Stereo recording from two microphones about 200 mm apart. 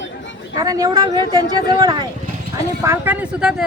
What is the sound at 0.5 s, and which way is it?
A woman's voice, 20° right (ahead or behind).